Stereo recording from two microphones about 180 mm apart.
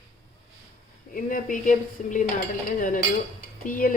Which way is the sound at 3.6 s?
50° left (ahead or behind).